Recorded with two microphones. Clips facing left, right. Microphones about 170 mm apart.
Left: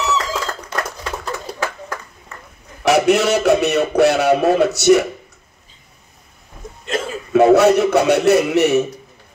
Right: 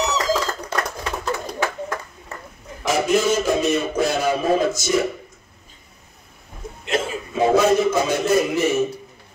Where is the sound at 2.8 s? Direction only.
70° left (ahead or behind).